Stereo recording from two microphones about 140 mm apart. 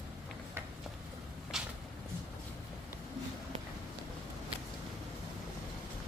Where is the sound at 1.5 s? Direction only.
5° right (ahead or behind).